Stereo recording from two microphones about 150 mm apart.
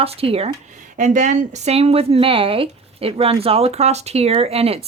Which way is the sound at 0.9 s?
55° right (ahead or behind).